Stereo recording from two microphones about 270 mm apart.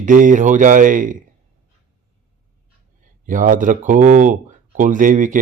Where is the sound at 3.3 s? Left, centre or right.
Right.